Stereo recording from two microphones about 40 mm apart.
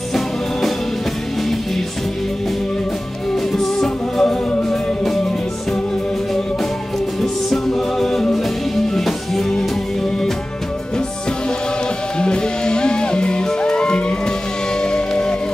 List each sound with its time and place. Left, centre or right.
3.5 s music: centre
7.2 s music: centre
12.2 s music: left